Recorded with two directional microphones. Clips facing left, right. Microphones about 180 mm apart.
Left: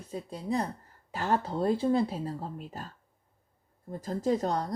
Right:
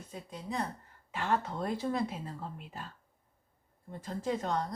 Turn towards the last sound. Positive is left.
turn(degrees=40)  # may be behind; listen again after turning